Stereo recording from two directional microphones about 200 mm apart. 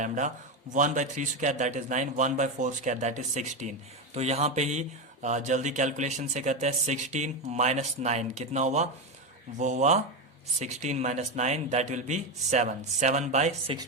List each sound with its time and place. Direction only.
0.7 s speech: 40° right (ahead or behind)